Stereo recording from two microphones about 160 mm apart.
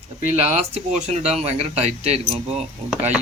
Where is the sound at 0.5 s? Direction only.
45° right (ahead or behind).